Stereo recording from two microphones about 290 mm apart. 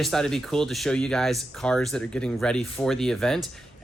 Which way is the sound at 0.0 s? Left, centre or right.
Centre.